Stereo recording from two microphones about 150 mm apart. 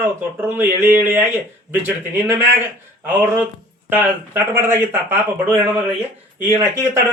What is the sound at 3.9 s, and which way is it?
Speech, 10° right (ahead or behind).